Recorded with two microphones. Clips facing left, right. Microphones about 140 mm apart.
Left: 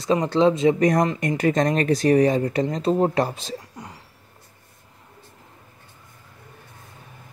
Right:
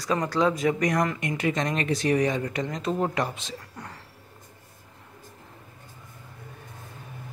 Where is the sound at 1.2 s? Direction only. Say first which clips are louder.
Left 6 dB; 40° left (ahead or behind).